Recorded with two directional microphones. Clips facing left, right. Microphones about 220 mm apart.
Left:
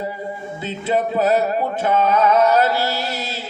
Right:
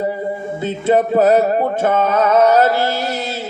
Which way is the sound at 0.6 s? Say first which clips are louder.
Right 5 dB; 50° right (ahead or behind).